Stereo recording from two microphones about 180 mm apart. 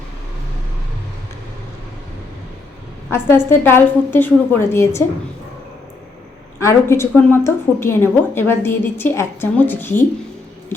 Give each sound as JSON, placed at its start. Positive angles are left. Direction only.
{"t": 3.1, "sound": "a woman's voice", "side_deg": 15}
{"t": 6.6, "sound": "a woman's voice", "side_deg": 15}